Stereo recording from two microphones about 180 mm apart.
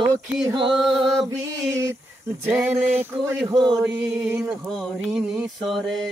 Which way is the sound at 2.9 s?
10° right (ahead or behind).